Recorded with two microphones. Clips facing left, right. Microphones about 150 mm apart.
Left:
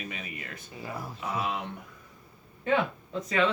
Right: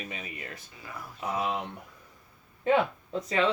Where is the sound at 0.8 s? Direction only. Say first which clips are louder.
Left 6 dB; 30° left (ahead or behind).